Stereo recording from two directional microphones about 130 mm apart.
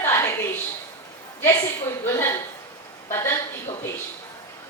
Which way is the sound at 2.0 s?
20° left (ahead or behind).